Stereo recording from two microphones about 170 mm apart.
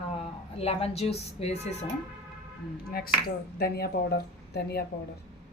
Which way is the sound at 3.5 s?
65° left (ahead or behind).